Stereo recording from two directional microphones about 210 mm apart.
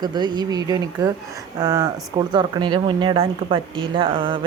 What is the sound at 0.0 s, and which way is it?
Speech, 20° right (ahead or behind).